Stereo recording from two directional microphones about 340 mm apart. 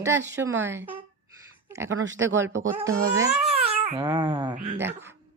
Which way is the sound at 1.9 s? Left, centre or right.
Right.